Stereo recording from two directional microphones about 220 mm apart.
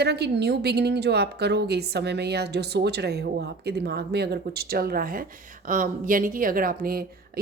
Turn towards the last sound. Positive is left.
turn(degrees=-40)  # may be behind; listen again after turning